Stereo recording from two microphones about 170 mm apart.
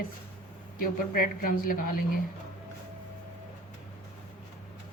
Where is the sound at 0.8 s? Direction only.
60° left (ahead or behind).